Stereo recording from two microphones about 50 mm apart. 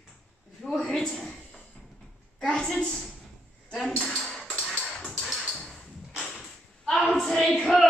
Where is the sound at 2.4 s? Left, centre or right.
Centre.